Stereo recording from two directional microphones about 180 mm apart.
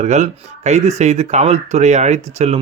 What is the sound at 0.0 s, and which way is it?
Speech, 40° right (ahead or behind).